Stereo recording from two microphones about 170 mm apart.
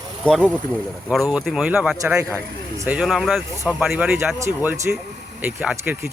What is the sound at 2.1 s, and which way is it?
Speech, 15° right (ahead or behind).